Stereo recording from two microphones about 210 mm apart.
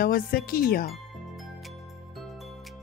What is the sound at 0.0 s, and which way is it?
Speech, 45° left (ahead or behind).